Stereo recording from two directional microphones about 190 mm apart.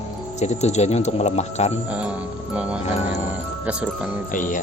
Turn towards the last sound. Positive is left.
turn(degrees=45)  # may be behind; listen again after turning